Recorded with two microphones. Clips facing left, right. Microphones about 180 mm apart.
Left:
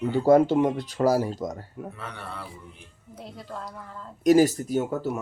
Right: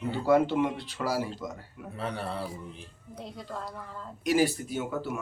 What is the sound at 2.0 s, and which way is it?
Speech, 30° right (ahead or behind).